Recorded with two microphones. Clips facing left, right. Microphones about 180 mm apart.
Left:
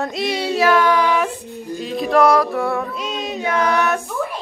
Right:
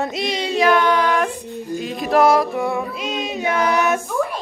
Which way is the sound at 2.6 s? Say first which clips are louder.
Left 1 dB; 15° right (ahead or behind).